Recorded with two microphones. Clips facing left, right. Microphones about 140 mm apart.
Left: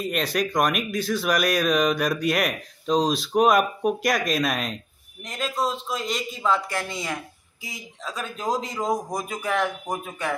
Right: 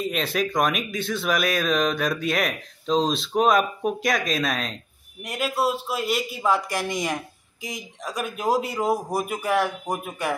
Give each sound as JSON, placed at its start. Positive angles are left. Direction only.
{"t": 0.1, "sound": "speech", "side_deg": 0}
{"t": 5.2, "sound": "a man's voice", "side_deg": -10}